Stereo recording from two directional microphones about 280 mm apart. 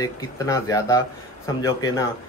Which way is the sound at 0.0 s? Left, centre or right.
Centre.